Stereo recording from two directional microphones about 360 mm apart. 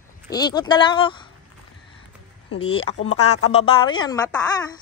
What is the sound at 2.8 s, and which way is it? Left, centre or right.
Speech, left.